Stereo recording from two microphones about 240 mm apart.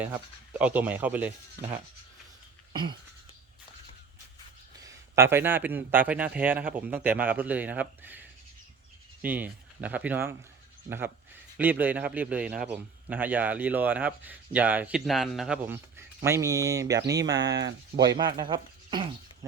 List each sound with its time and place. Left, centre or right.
0.6 s speech: centre
4.8 s speech: centre
9.2 s speech: centre
17.4 s speech: right
18.0 s speech: centre